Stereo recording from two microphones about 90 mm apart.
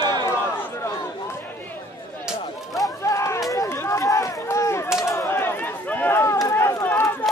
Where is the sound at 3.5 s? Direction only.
30° left (ahead or behind).